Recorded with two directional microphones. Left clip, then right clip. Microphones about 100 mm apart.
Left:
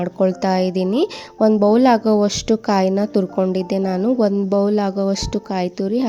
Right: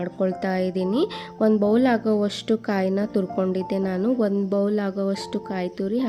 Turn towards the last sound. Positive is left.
turn(degrees=35)  # may be behind; listen again after turning